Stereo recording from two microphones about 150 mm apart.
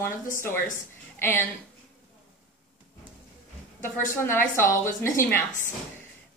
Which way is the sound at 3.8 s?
15° left (ahead or behind).